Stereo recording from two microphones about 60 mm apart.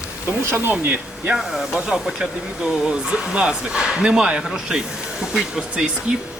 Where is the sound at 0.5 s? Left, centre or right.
Right.